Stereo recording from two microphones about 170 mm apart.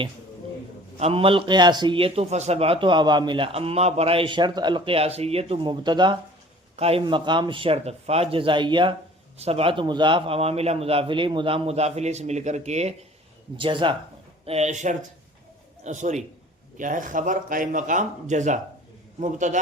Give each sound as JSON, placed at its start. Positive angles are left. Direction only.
{"t": 0.9, "sound": "a man's voice", "side_deg": -35}
{"t": 13.6, "sound": "speech", "side_deg": -30}